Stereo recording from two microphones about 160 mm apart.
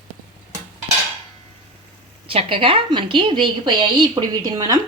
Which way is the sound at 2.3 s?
35° right (ahead or behind).